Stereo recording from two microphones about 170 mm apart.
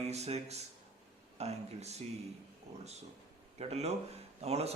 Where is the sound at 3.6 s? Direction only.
40° right (ahead or behind).